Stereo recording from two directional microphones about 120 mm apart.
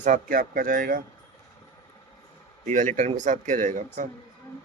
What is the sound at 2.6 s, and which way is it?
Speech, 90° right.